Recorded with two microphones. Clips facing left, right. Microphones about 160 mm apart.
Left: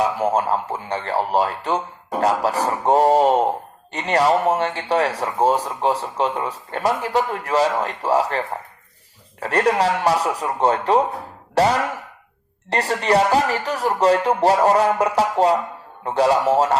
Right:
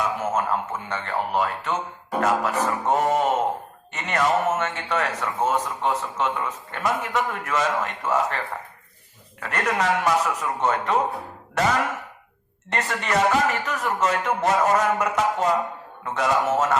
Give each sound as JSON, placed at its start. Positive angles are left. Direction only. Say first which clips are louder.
{"t": 0.0, "sound": "speech", "louder": "left 5 dB", "side_deg": 35}